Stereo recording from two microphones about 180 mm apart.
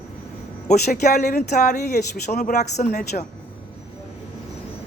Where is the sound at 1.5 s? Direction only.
40° left (ahead or behind).